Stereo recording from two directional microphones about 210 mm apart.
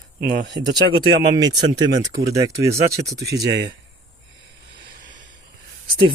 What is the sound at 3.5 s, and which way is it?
Speech, 55° right (ahead or behind).